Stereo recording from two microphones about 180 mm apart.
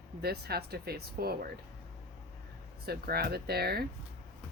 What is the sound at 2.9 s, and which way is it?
Speech, 60° right (ahead or behind).